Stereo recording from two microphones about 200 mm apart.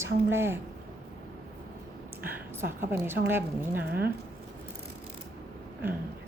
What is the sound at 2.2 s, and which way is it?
A woman's voice, 10° right (ahead or behind).